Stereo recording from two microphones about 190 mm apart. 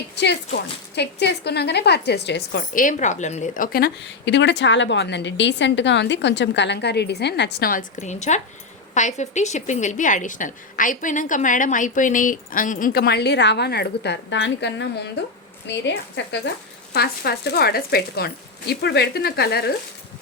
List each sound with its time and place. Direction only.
0.2 s a woman's voice: 60° left (ahead or behind)
16.9 s speech: 55° left (ahead or behind)